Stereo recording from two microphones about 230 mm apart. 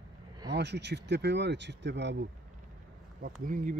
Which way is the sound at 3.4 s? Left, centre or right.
Right.